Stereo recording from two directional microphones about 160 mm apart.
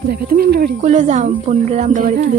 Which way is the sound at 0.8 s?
50° right (ahead or behind).